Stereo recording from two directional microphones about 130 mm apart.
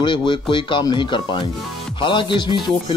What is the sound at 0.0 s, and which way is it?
Speech, 35° left (ahead or behind).